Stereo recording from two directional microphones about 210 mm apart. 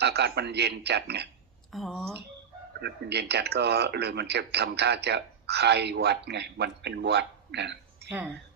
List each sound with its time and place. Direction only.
0.0 s speech: 50° right (ahead or behind)
1.7 s speech: centre (ahead or behind)
2.8 s speech: 50° right (ahead or behind)